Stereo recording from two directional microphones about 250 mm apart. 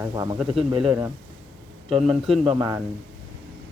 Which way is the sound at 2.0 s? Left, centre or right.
Centre.